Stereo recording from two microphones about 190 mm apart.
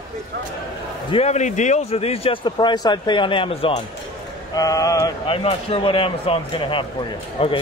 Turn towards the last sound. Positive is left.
turn(degrees=30)  # may be behind; listen again after turning